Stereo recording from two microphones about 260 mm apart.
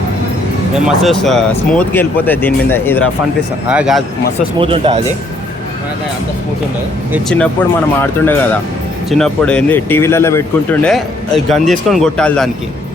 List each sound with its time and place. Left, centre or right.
0.9 s a man's voice: centre
3.7 s a man's voice: centre
4.6 s speech: right
7.1 s a man's voice: centre